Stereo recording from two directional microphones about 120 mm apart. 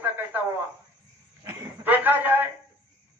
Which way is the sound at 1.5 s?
15° right (ahead or behind).